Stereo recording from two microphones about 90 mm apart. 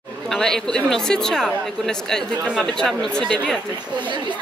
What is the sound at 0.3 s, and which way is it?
Speech, 5° left (ahead or behind).